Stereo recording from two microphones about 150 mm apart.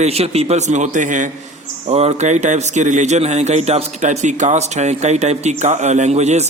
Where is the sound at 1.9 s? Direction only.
45° right (ahead or behind).